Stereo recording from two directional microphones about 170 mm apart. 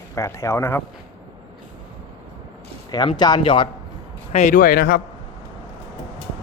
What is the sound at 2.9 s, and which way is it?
Speech, 25° left (ahead or behind).